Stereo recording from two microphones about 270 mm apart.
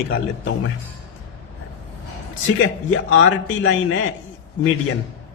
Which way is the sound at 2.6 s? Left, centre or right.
Left.